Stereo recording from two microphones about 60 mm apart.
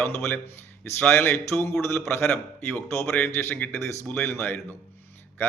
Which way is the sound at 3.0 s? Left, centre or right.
Left.